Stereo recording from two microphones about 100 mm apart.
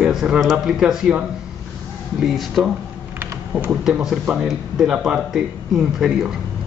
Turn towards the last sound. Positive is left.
turn(degrees=-5)  # may be behind; listen again after turning